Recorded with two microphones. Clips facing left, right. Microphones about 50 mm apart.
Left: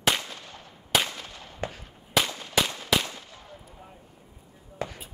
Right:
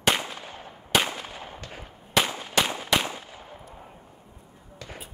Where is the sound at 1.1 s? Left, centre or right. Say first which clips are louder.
Right 5 dB; right.